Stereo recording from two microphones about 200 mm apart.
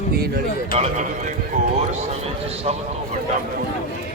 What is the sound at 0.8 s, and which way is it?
Speech, 35° right (ahead or behind).